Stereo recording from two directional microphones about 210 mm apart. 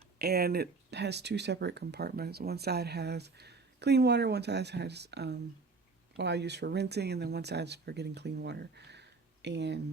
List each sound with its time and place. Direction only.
0.2 s speech: 50° right (ahead or behind)